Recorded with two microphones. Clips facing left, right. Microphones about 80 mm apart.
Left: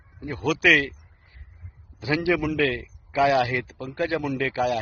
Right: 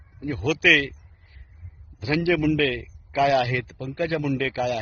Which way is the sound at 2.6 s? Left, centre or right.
Left.